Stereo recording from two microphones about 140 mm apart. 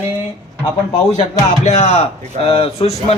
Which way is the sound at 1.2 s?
55° left (ahead or behind).